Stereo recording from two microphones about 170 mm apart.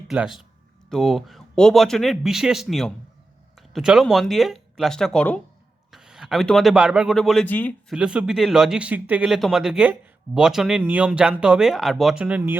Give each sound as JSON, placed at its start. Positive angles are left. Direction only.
{"t": 0.1, "sound": "speech", "side_deg": 0}
{"t": 7.9, "sound": "speech", "side_deg": -5}